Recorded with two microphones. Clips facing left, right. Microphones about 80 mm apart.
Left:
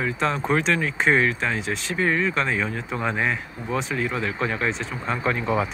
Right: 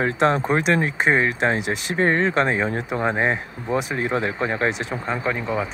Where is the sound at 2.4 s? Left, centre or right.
Right.